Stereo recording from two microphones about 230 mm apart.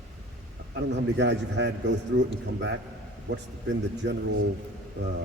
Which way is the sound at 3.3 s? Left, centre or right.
Right.